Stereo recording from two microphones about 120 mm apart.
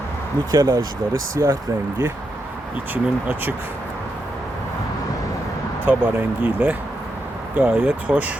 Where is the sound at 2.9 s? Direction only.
15° right (ahead or behind).